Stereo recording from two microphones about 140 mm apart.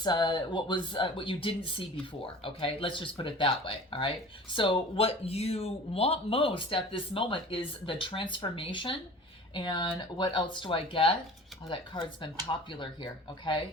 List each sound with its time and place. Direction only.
0.0 s speech: 30° left (ahead or behind)